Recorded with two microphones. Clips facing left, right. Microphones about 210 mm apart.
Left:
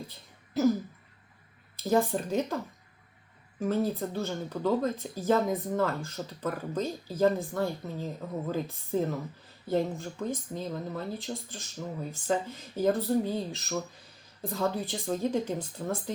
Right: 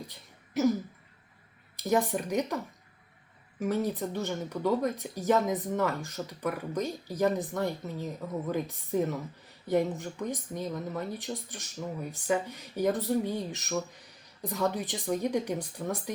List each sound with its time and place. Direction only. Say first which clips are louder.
1.7 s speech: left 1 dB; 15° right (ahead or behind)
3.6 s speech: left 1 dB; 15° right (ahead or behind)